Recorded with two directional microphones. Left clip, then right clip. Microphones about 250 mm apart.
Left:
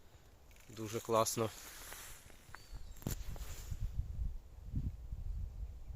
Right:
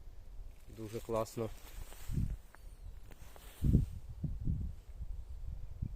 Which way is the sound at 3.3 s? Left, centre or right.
Centre.